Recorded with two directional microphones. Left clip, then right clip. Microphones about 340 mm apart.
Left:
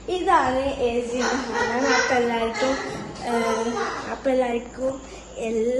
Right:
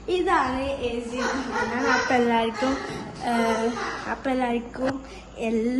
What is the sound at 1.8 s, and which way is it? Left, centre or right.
Speech, centre.